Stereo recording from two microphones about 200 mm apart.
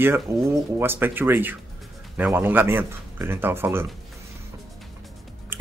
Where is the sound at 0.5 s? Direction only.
10° right (ahead or behind).